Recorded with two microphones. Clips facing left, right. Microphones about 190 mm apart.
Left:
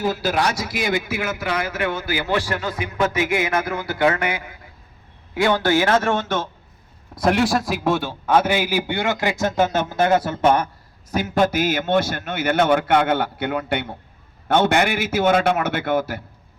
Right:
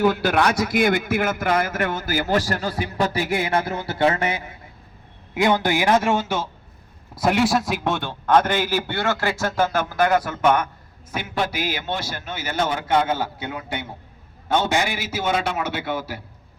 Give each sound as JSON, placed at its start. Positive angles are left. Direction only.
{"t": 0.0, "sound": "a man's voice", "side_deg": -60}
{"t": 11.1, "sound": "a man's voice", "side_deg": 40}